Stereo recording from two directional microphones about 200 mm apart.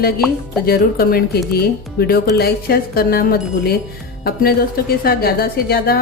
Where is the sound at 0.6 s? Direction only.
50° left (ahead or behind).